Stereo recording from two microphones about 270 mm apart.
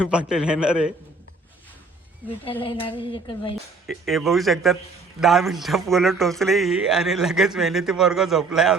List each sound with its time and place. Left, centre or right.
0.0 s speech: centre
2.4 s speech: centre
3.8 s speech: centre